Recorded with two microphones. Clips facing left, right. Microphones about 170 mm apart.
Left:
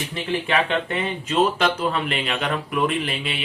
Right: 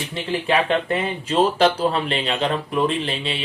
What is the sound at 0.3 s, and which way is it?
Speech, 35° right (ahead or behind).